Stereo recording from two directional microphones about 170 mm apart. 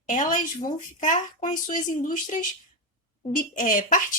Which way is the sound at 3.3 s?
50° left (ahead or behind).